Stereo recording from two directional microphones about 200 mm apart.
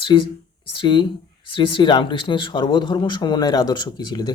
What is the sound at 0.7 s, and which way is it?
Speech, 25° left (ahead or behind).